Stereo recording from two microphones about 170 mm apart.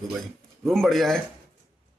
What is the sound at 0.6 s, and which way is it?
Speech, centre (ahead or behind).